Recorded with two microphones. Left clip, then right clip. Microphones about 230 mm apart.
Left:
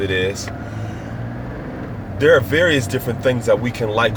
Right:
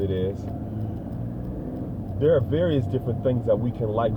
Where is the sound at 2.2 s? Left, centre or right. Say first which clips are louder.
Left 8 dB; left.